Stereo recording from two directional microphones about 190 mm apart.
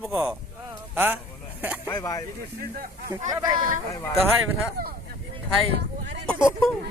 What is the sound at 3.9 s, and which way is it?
Speech, 15° left (ahead or behind).